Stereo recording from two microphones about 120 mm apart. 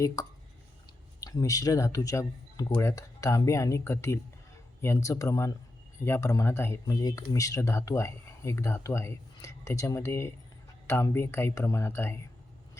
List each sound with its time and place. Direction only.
0.2 s speech: 30° left (ahead or behind)